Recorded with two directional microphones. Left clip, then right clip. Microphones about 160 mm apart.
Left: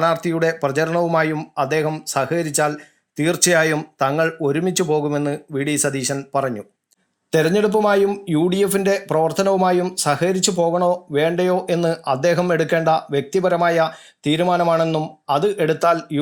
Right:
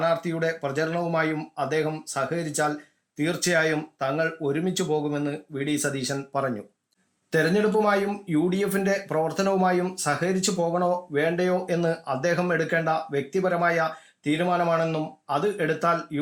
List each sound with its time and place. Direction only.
0.0 s speech: 30° left (ahead or behind)
7.3 s speech: 30° left (ahead or behind)